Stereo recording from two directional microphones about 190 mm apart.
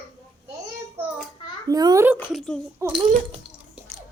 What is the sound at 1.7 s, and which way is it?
Speech, 20° right (ahead or behind).